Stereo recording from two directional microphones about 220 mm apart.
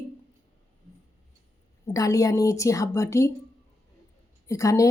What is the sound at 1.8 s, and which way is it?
Speech, 15° left (ahead or behind).